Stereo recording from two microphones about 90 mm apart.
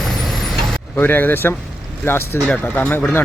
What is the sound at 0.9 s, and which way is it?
Speech, 20° left (ahead or behind).